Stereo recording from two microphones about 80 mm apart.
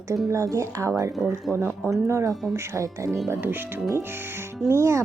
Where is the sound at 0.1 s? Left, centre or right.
Right.